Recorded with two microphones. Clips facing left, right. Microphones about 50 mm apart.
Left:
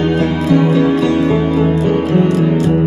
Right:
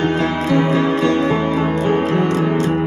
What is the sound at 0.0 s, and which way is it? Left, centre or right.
Music, right.